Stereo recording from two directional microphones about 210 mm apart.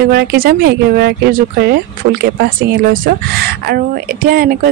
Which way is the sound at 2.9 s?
45° right (ahead or behind).